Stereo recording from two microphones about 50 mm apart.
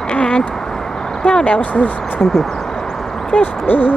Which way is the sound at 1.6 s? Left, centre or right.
Left.